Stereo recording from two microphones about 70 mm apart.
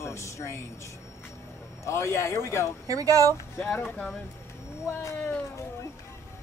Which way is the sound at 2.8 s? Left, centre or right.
Right.